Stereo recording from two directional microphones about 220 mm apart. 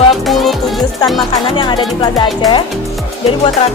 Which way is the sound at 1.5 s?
20° left (ahead or behind).